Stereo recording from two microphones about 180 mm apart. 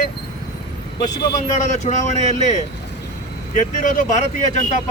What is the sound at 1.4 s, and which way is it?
Speech, 40° left (ahead or behind).